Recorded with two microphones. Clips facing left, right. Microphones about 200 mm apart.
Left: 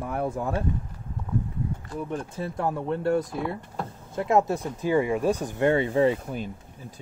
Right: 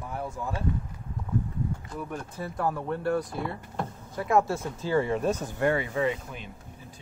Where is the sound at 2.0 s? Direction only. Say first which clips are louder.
Left 5 dB; 25° left (ahead or behind).